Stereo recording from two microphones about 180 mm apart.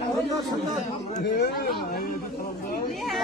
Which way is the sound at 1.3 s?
60° left (ahead or behind).